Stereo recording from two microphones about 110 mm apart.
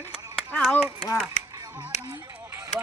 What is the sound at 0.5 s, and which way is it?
Clapping, 15° left (ahead or behind).